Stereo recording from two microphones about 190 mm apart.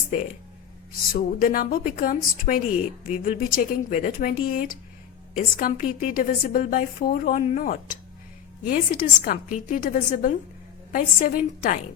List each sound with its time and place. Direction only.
1.1 s a woman's voice: 45° left (ahead or behind)